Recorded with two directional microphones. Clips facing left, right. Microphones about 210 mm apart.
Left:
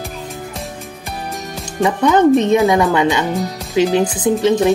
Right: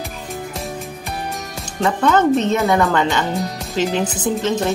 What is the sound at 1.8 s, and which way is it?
Speech, 15° left (ahead or behind).